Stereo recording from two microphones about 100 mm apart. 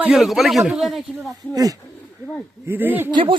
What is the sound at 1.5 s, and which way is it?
Speech, 35° right (ahead or behind).